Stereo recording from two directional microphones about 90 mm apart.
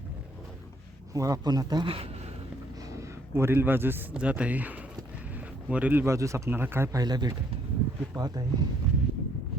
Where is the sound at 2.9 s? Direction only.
30° right (ahead or behind).